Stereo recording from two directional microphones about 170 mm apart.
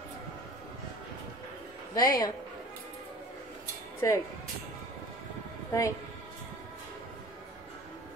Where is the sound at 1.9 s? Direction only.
20° left (ahead or behind).